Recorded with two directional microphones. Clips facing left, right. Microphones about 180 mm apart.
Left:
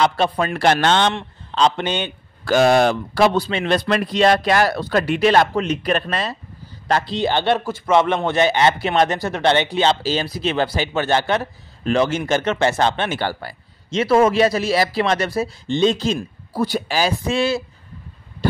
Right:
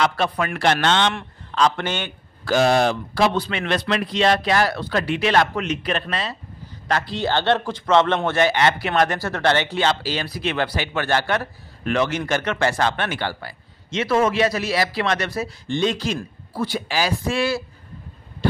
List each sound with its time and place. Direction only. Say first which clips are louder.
0.0 s a man's voice: left 3 dB; 30° left (ahead or behind)
1.1 s a man's voice: left 2 dB; 25° left (ahead or behind)
2.4 s speech: left 3 dB; 50° left (ahead or behind)
3.3 s speech: left 4 dB; 30° left (ahead or behind)
5.3 s a man's voice: left 3 dB; 30° left (ahead or behind)
6.9 s speech: left 3 dB; 30° left (ahead or behind)
7.2 s speech: even; 15° left (ahead or behind)
16.5 s a man's voice: left 3 dB; 40° left (ahead or behind)
17.0 s speech: left 2 dB; 25° left (ahead or behind)